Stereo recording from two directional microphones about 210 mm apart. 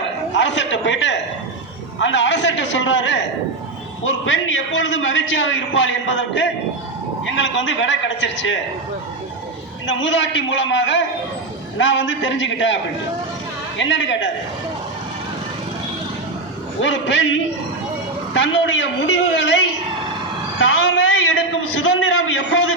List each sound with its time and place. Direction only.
0.3 s a man's voice: 60° left (ahead or behind)
9.8 s a man's voice: 60° left (ahead or behind)
16.8 s a man's voice: 60° left (ahead or behind)
18.3 s a man's voice: 60° left (ahead or behind)